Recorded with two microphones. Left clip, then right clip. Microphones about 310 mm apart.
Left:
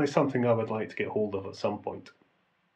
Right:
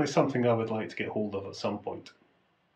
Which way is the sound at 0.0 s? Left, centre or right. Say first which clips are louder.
Even; centre.